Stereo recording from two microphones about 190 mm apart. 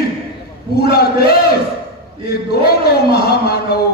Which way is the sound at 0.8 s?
55° left (ahead or behind).